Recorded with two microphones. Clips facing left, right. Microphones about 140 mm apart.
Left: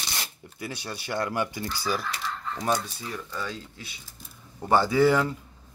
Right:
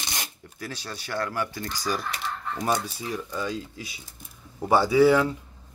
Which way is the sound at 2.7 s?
15° right (ahead or behind).